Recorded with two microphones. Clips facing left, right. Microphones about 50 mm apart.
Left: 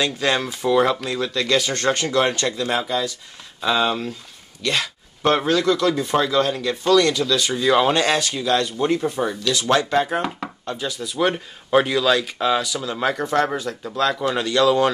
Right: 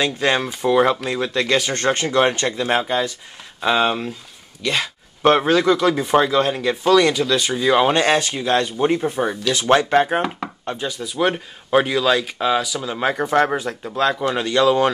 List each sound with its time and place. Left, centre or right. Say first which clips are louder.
0.0 s speech: right 2 dB; centre
7.9 s speech: right 2 dB; right
10.6 s a sound: right 1 dB; right
10.9 s speech: right 1 dB; centre
14.1 s speech: right 1 dB; centre